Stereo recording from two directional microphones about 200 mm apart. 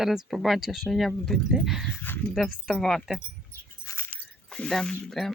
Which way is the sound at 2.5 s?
Centre (ahead or behind).